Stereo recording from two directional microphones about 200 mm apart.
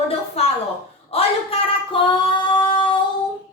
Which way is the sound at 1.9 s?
25° left (ahead or behind).